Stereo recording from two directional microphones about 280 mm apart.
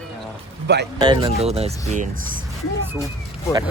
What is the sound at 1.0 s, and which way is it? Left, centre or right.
Speech, centre.